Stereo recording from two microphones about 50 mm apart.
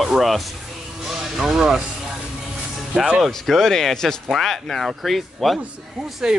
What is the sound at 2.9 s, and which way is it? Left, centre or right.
Speech, centre.